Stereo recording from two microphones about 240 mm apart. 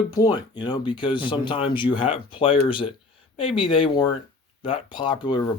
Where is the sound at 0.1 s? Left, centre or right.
Centre.